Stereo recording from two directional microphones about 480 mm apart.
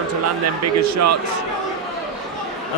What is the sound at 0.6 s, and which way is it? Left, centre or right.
Speech, right.